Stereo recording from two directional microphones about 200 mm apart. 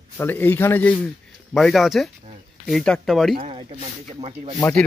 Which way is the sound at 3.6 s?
25° right (ahead or behind).